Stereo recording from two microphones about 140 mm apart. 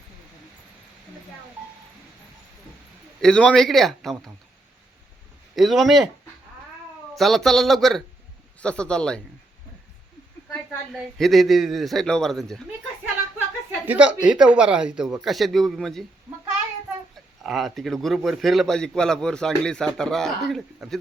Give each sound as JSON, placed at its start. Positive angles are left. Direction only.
{"t": 3.2, "sound": "a man's voice", "side_deg": 5}
{"t": 5.5, "sound": "a man's voice", "side_deg": 0}
{"t": 7.2, "sound": "a man's voice", "side_deg": 0}
{"t": 10.9, "sound": "a man's voice", "side_deg": 0}
{"t": 13.8, "sound": "a man's voice", "side_deg": -10}
{"t": 17.4, "sound": "a man's voice", "side_deg": 0}